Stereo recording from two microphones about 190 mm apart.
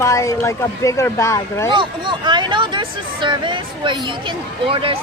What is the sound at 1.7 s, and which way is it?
Speech, 25° right (ahead or behind).